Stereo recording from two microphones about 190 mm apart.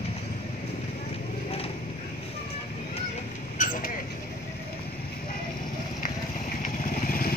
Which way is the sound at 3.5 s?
45° left (ahead or behind).